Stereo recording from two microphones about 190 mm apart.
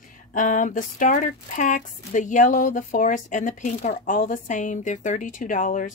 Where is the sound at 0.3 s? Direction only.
40° left (ahead or behind).